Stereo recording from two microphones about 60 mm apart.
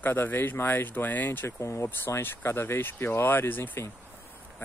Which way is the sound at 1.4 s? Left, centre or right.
Left.